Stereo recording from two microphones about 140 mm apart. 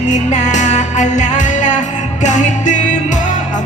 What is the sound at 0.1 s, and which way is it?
Music, 60° left (ahead or behind).